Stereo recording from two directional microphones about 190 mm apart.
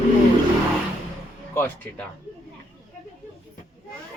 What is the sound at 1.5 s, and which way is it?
Speech, 10° left (ahead or behind).